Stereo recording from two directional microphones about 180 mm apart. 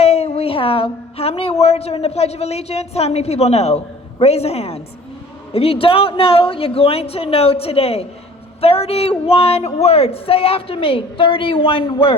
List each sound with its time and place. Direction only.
0.0 s a woman's voice: 35° left (ahead or behind)